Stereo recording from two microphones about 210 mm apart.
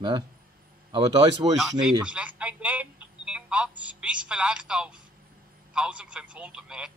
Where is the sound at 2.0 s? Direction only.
5° right (ahead or behind).